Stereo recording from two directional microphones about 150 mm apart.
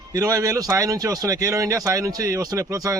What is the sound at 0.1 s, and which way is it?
Speech, 25° right (ahead or behind).